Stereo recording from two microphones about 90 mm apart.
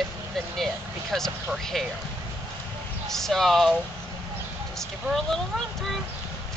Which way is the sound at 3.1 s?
5° left (ahead or behind).